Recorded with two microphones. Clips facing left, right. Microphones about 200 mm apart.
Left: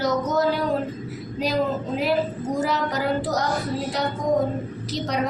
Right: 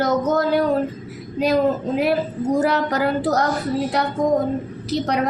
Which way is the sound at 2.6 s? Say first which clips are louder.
Right 4 dB; 60° right (ahead or behind).